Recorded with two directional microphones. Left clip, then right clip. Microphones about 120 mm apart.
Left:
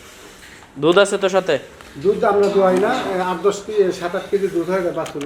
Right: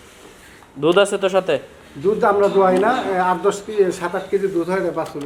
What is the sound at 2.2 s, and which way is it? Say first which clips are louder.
Speech: right 1 dB; 40° right (ahead or behind).